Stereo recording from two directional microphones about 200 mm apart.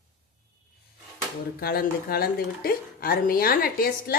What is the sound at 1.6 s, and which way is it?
Speech, 50° left (ahead or behind).